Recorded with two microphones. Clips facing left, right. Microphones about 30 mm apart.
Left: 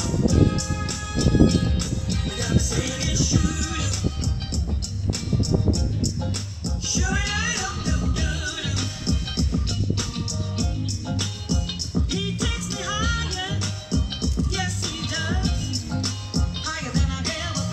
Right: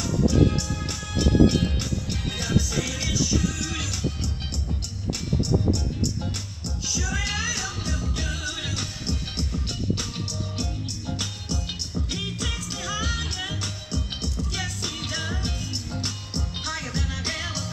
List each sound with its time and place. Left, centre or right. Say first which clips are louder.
0.3 s music: left 1 dB; centre
6.6 s music: left 2 dB; centre